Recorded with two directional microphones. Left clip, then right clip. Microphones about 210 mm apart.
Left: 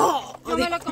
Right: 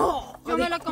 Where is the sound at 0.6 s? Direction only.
25° right (ahead or behind).